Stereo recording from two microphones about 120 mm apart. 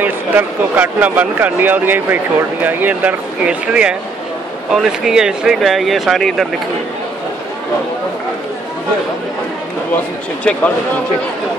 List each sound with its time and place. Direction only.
0.0 s speech: 15° right (ahead or behind)